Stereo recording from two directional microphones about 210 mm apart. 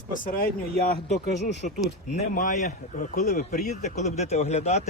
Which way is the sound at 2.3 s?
35° left (ahead or behind).